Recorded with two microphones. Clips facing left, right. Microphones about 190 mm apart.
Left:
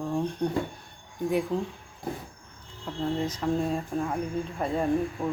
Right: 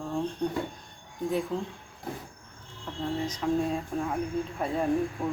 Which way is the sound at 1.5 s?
15° left (ahead or behind).